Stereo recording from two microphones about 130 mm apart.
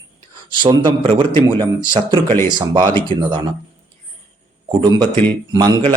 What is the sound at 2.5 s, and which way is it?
Speech, 35° right (ahead or behind).